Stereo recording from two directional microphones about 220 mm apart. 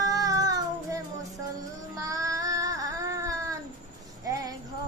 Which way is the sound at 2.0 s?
15° right (ahead or behind).